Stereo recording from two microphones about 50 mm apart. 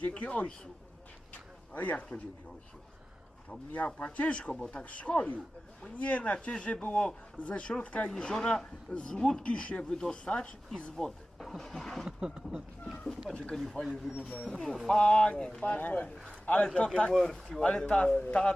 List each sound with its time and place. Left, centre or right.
0.0 s speech: left
1.3 s a sound: left
3.7 s speech: left
8.1 s speech: centre
10.9 s speech: centre
12.0 s speech: centre
13.8 s speech: left
14.4 s speech: centre
14.8 s a man's voice: centre
17.1 s speech: centre; by 18.5 s left